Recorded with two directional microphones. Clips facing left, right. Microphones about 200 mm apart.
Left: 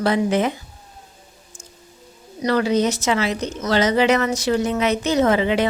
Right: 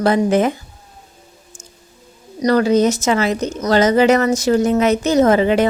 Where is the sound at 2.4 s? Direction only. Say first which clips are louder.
Right 5 dB; 45° right (ahead or behind).